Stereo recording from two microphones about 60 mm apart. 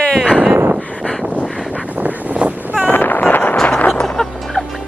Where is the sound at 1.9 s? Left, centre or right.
Right.